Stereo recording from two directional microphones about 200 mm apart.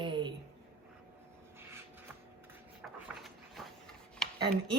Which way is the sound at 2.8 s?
Centre (ahead or behind).